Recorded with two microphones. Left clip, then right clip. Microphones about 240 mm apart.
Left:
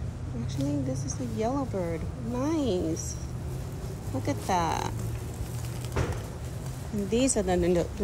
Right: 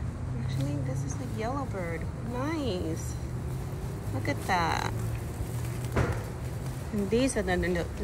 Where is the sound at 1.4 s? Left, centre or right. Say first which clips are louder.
Left 4 dB; left.